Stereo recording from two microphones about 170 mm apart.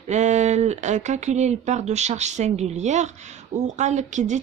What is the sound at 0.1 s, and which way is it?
Speech, 45° right (ahead or behind).